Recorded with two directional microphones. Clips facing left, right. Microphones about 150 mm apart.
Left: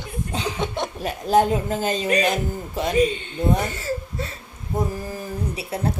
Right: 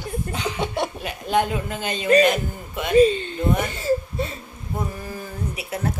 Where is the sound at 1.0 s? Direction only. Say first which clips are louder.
Left 6 dB; 35° left (ahead or behind).